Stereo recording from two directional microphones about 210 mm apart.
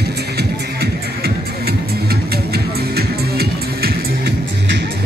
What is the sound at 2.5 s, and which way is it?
Music, 50° right (ahead or behind).